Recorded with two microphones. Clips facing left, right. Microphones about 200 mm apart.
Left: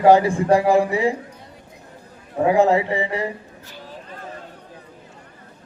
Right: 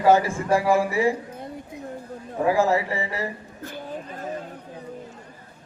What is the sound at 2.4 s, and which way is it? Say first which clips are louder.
Speech: left 4 dB; 20° left (ahead or behind).